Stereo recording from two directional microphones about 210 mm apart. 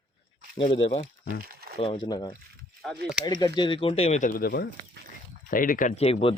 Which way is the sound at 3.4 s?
20° left (ahead or behind).